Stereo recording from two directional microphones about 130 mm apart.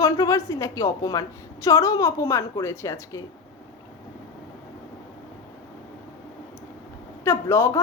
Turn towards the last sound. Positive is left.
turn(degrees=25)  # may be behind; listen again after turning